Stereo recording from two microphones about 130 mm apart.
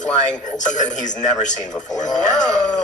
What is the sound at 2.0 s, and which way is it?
Speech, 70° left (ahead or behind).